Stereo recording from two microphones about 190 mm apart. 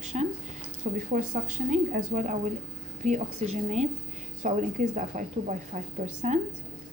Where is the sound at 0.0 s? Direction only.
35° right (ahead or behind).